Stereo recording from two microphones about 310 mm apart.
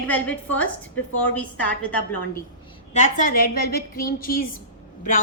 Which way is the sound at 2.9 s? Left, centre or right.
Left.